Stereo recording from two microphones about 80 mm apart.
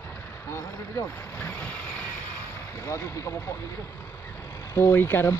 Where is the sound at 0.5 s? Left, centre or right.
Left.